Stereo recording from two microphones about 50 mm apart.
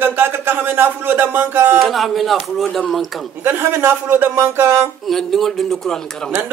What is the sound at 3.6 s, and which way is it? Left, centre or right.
Speech, right.